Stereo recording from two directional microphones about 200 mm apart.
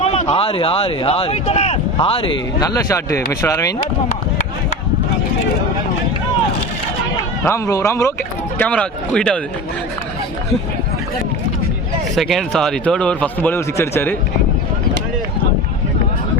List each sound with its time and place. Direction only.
0.0 s speech: 30° left (ahead or behind); by 3.8 s 15° left (ahead or behind)
4.1 s a sound: 35° left (ahead or behind)
7.4 s a man's voice: 15° left (ahead or behind)
12.1 s speech: centre (ahead or behind)